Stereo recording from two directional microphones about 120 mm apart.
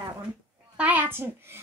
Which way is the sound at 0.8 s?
15° right (ahead or behind).